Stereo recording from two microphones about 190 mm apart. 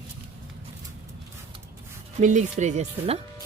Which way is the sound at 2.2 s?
40° right (ahead or behind).